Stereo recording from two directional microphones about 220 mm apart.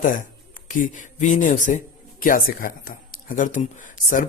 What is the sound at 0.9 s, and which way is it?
A man's voice, 35° left (ahead or behind).